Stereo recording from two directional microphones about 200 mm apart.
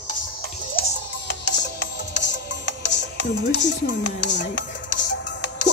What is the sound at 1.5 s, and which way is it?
Music, 60° left (ahead or behind).